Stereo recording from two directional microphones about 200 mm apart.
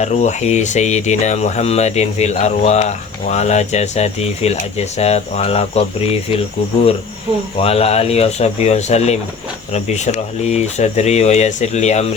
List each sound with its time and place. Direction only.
0.0 s speech: 35° left (ahead or behind)
7.6 s speech: 30° left (ahead or behind)